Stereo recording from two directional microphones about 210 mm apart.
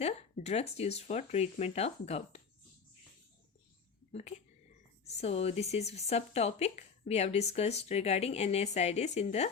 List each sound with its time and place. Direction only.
0.0 s a woman's voice: 30° left (ahead or behind)
4.1 s a woman's voice: 30° left (ahead or behind)